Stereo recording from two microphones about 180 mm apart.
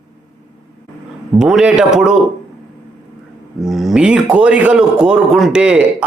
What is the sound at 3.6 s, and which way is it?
A man's voice, centre (ahead or behind).